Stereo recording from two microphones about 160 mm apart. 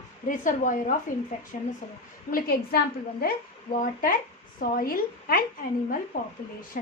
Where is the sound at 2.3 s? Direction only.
65° left (ahead or behind).